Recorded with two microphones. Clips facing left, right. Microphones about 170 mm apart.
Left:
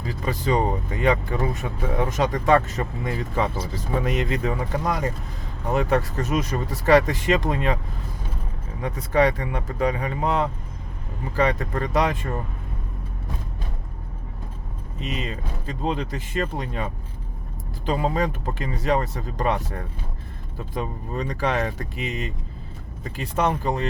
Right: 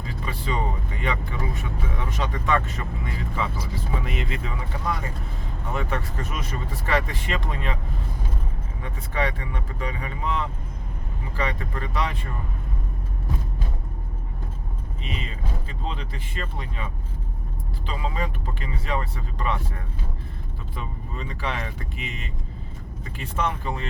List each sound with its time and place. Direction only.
0.0 s vehicle: 40° left (ahead or behind)
1.0 s speech: 40° left (ahead or behind)
8.8 s speech: 40° left (ahead or behind)
15.0 s speech: 40° left (ahead or behind)
20.7 s speech: 45° left (ahead or behind)